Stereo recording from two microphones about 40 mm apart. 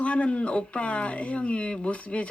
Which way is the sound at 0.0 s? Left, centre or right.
Left.